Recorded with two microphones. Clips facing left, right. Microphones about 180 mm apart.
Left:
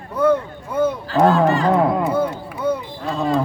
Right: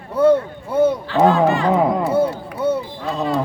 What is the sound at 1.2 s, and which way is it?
Speech, 15° right (ahead or behind).